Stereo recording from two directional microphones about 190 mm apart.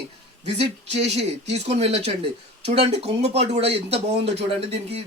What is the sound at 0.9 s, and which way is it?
A man's voice, 35° right (ahead or behind).